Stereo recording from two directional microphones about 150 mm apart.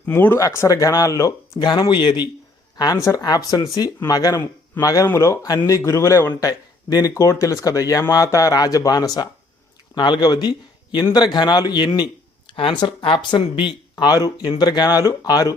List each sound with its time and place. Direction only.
0.0 s speech: 15° left (ahead or behind)